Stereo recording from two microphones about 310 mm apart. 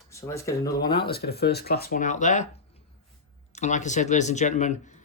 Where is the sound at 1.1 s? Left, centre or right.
Left.